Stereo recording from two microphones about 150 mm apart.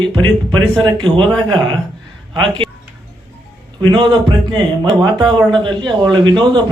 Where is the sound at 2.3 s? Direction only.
35° right (ahead or behind).